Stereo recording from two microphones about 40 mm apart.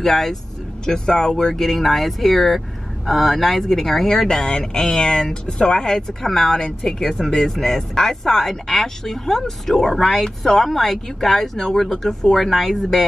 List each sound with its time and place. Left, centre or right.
0.0 s speech: centre